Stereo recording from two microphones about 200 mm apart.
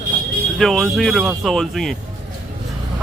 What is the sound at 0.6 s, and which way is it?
Speech, centre (ahead or behind).